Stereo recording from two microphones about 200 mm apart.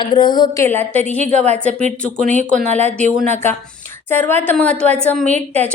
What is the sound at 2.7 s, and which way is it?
Speech, 35° right (ahead or behind).